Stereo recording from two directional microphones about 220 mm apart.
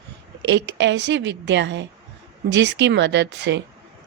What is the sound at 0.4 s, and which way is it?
Speech, 55° right (ahead or behind).